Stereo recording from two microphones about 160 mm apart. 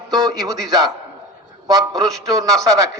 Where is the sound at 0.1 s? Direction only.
25° right (ahead or behind).